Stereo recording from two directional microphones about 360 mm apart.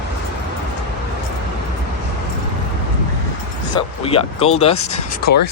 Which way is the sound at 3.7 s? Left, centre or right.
Centre.